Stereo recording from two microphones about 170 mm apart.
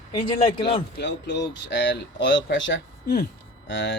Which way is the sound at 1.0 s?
90° left.